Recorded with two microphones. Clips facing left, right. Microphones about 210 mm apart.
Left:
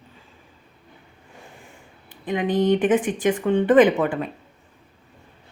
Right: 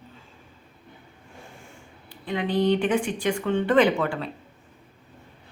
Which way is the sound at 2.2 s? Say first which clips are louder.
Left 3 dB; 20° left (ahead or behind).